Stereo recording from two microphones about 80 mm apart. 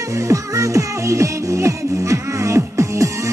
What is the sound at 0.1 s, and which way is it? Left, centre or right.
Music, right.